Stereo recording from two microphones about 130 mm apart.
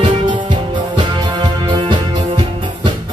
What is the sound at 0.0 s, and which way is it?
Music, 40° right (ahead or behind).